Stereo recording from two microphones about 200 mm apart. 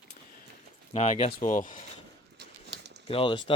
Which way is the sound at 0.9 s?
35° left (ahead or behind).